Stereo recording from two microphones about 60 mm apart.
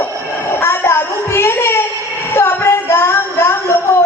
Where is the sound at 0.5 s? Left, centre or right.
Left.